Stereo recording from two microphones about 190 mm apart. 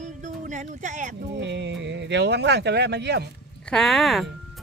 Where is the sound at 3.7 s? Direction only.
Centre (ahead or behind).